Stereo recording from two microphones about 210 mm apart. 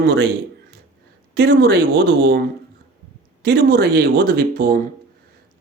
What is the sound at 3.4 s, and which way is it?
Speech, 45° right (ahead or behind).